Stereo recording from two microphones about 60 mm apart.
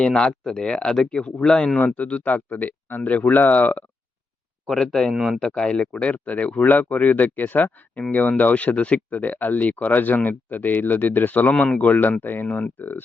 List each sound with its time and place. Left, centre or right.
0.0 s speech: centre
4.6 s speech: centre
5.4 s speech: centre
11.5 s speech: centre
11.8 s speech: left